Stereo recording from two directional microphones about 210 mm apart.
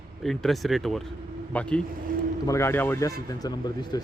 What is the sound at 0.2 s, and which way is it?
A man's voice, centre (ahead or behind).